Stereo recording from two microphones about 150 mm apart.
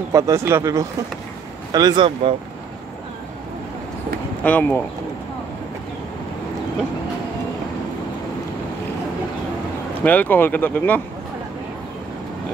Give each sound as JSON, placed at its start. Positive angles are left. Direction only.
{"t": 0.1, "sound": "speech", "side_deg": -20}
{"t": 4.4, "sound": "speech", "side_deg": 10}
{"t": 10.0, "sound": "speech", "side_deg": 10}